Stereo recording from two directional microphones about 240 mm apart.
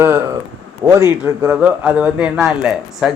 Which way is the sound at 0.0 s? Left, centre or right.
Centre.